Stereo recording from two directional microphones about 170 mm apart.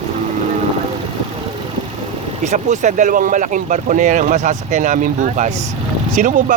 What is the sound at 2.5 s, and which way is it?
Speech, 45° right (ahead or behind).